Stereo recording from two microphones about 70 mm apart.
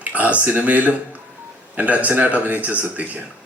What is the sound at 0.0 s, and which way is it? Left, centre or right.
A man's voice, right.